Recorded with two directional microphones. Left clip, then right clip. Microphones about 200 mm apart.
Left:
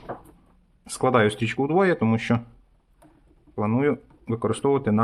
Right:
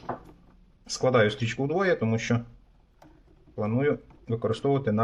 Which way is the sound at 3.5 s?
30° left (ahead or behind).